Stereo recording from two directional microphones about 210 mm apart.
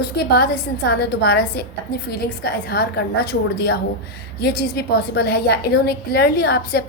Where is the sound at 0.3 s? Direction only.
50° left (ahead or behind).